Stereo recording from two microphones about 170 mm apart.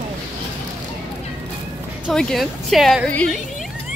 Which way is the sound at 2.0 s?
5° left (ahead or behind).